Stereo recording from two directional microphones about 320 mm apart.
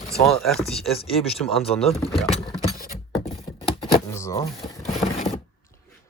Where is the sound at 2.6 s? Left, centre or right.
Left.